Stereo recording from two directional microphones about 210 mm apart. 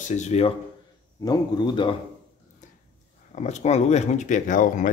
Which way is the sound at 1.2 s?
20° left (ahead or behind).